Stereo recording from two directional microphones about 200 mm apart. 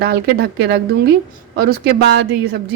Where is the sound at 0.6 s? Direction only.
55° right (ahead or behind).